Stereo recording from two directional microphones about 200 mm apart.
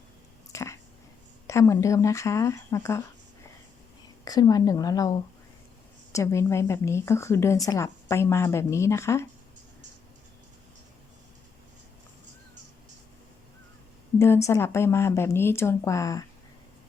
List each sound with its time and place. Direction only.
0.5 s a sound: 15° left (ahead or behind)
1.5 s a woman's voice: 15° left (ahead or behind)
4.3 s a woman's voice: 20° left (ahead or behind)
14.2 s a woman's voice: 15° left (ahead or behind)